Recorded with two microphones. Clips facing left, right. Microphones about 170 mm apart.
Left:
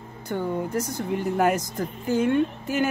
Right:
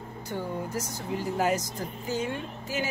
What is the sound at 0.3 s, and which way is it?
Speech, 60° left (ahead or behind).